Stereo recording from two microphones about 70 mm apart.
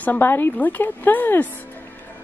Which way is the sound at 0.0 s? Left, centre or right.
Left.